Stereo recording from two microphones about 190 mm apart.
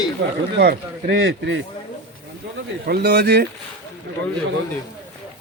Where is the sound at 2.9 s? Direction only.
60° right (ahead or behind).